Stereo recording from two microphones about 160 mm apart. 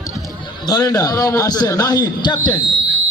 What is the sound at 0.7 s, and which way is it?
A man's voice, 25° left (ahead or behind).